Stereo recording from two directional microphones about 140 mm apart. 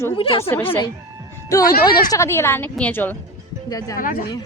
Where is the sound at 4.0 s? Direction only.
90° left.